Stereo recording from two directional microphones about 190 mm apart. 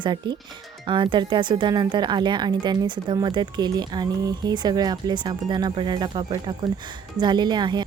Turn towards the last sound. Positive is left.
turn(degrees=-25)  # may be behind; listen again after turning